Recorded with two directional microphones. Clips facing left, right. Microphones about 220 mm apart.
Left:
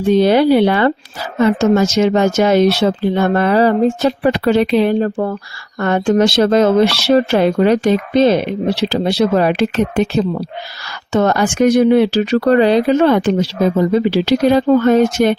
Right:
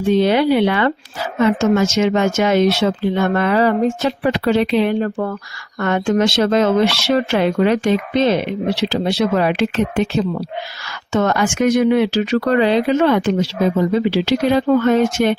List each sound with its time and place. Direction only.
0.1 s speech: 40° left (ahead or behind)